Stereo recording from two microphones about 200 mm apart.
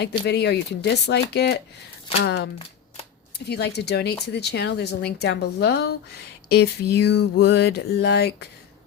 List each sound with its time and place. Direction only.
0.3 s speech: 55° left (ahead or behind)